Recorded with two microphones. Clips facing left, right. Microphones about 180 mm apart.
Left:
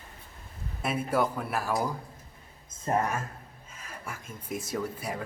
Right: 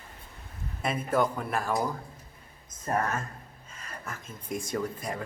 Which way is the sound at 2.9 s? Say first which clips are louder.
Left 1 dB; 20° left (ahead or behind).